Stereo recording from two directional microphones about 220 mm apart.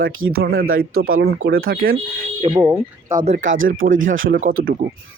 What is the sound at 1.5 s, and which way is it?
Speech, 40° right (ahead or behind).